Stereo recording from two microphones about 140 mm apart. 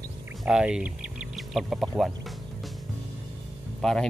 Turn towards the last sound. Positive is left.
turn(degrees=5)  # may be behind; listen again after turning